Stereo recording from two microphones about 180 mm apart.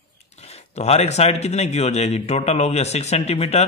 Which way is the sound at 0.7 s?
35° left (ahead or behind).